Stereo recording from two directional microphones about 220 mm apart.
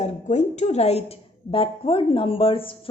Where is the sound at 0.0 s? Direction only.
30° left (ahead or behind).